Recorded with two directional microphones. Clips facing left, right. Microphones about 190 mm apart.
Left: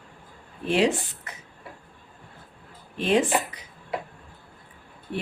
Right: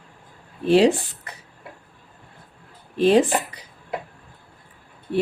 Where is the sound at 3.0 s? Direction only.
35° right (ahead or behind).